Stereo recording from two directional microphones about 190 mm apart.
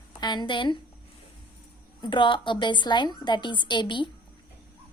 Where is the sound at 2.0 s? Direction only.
25° left (ahead or behind).